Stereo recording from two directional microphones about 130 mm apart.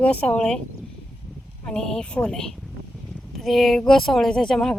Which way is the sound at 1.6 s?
5° left (ahead or behind).